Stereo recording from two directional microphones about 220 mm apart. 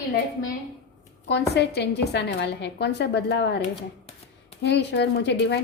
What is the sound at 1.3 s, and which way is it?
A woman's voice, 50° left (ahead or behind).